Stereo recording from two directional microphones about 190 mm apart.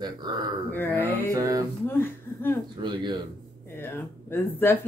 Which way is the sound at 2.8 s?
25° right (ahead or behind).